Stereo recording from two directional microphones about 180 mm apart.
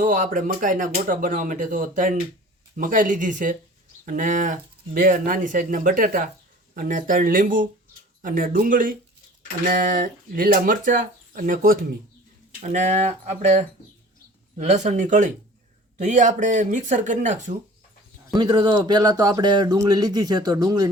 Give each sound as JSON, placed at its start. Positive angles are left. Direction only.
{"t": 0.0, "sound": "speech", "side_deg": -45}
{"t": 18.3, "sound": "speech", "side_deg": -25}